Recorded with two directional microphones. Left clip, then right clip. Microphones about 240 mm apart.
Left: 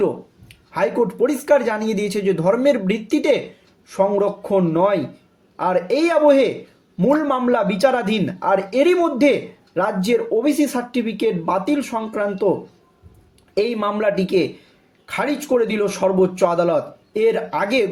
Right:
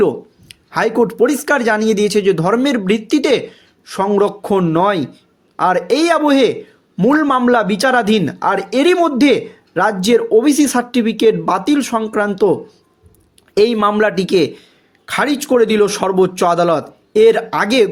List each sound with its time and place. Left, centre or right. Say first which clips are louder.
0.0 s speech: right 6 dB; right